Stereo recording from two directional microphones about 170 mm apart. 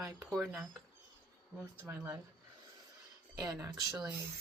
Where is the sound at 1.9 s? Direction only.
10° right (ahead or behind).